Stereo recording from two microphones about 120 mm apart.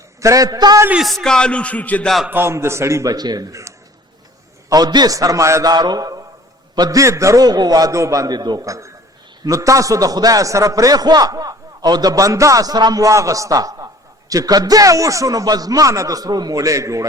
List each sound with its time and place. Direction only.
0.2 s a man's voice: 25° right (ahead or behind)
0.9 s speech: 5° right (ahead or behind)
2.3 s a man's voice: 20° right (ahead or behind)
4.7 s a man's voice: 35° right (ahead or behind)